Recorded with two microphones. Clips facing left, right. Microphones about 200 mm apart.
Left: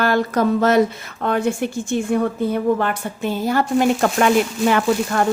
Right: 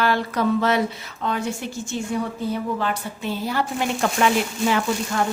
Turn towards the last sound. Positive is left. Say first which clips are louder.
# left 5 dB
turn(degrees=55)  # may be behind; listen again after turning